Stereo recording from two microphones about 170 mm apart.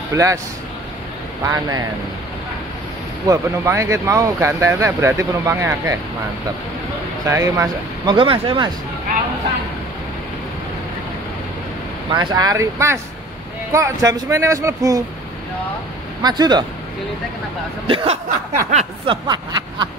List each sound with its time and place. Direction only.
0.1 s speech: 20° right (ahead or behind)
1.4 s speech: 20° right (ahead or behind)
3.3 s speech: 15° right (ahead or behind)
7.2 s speech: 20° right (ahead or behind)
12.1 s speech: 25° right (ahead or behind)
16.2 s speech: 25° right (ahead or behind)
17.8 s speech: 35° right (ahead or behind)
18.7 s a sound: 40° right (ahead or behind)
19.2 s speech: 25° right (ahead or behind)